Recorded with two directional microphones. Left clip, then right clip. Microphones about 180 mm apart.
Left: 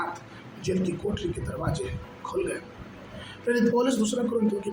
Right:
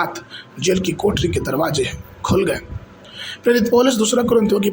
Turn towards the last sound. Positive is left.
turn(degrees=-50)  # may be behind; listen again after turning